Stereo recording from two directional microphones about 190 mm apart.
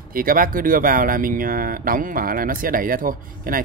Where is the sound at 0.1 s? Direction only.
50° right (ahead or behind).